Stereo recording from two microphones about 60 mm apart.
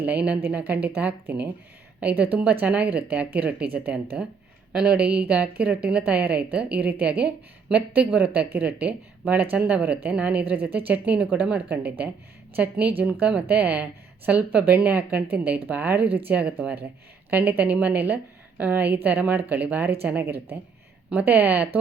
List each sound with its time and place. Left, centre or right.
0.0 s speech: right
20.2 s speech: right
21.1 s speech: right